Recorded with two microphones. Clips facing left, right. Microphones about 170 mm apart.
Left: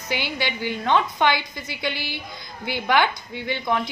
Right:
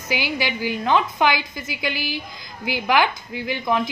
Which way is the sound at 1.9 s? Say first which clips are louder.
Right 4 dB; 90° right.